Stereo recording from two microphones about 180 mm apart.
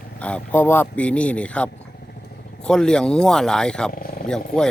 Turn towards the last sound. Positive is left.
turn(degrees=5)  # may be behind; listen again after turning